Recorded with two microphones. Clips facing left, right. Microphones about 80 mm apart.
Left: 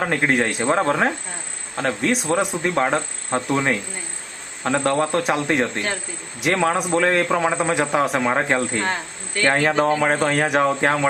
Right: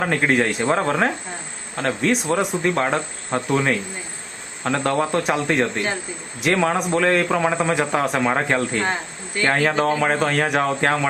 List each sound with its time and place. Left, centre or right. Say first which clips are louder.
0.0 s a man's voice: right 1 dB; centre